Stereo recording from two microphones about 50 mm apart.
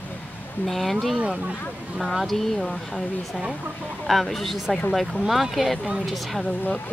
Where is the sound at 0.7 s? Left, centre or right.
Centre.